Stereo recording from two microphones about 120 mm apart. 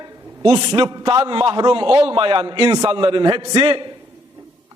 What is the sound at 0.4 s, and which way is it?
A man's voice, 35° right (ahead or behind).